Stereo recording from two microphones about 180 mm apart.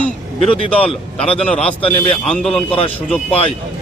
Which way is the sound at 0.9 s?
30° left (ahead or behind).